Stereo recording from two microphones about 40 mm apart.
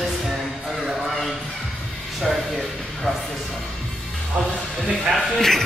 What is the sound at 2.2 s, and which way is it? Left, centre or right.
Speech, centre.